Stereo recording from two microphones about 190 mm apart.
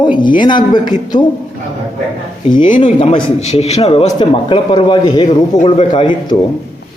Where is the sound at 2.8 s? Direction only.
25° left (ahead or behind).